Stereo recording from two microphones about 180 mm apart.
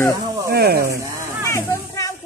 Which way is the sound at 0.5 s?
60° right (ahead or behind).